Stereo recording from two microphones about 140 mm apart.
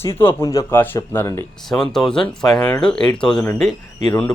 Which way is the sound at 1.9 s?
5° left (ahead or behind).